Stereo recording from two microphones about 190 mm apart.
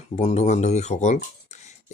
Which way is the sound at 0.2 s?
35° left (ahead or behind).